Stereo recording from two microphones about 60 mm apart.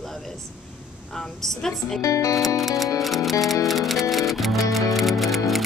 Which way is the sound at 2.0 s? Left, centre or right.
Left.